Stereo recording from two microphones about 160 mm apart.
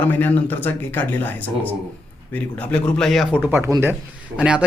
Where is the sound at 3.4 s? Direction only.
15° right (ahead or behind).